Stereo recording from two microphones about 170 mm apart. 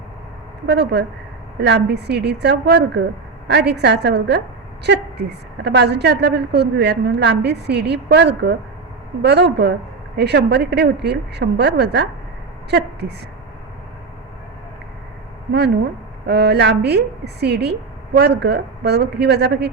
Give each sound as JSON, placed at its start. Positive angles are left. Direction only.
{"t": 0.7, "sound": "a woman's voice", "side_deg": -80}
{"t": 16.2, "sound": "a woman's voice", "side_deg": -75}